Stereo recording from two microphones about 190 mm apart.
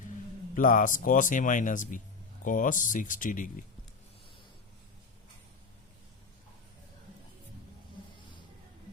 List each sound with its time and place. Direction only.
0.5 s speech: 45° left (ahead or behind)